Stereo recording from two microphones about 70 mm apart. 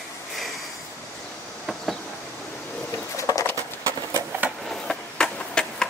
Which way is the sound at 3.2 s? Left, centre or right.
Left.